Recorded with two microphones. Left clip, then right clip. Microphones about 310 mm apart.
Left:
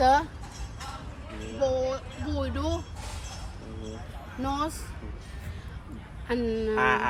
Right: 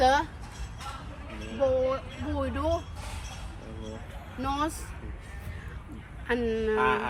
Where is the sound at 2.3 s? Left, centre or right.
Right.